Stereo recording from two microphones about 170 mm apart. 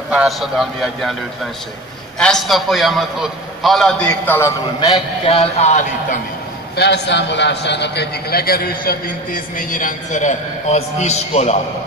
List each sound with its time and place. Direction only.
0.1 s a man's voice: 5° right (ahead or behind)
2.1 s a man's voice: 5° left (ahead or behind)
4.1 s a man's voice: 15° left (ahead or behind)
4.7 s a man's voice: 25° left (ahead or behind); by 6.1 s 45° left (ahead or behind)
6.8 s a man's voice: 90° left; by 11.5 s 40° left (ahead or behind)